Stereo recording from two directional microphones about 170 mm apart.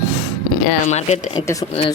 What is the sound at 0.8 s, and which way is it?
Speech, 45° left (ahead or behind).